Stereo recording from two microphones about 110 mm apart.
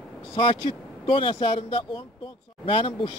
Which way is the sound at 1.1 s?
50° left (ahead or behind).